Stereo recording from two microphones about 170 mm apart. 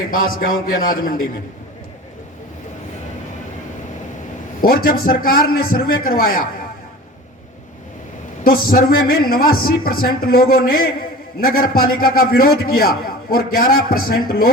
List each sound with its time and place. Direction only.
0.1 s a man's voice: 55° left (ahead or behind)
4.6 s a man's voice: 60° left (ahead or behind)
8.4 s a man's voice: 60° left (ahead or behind)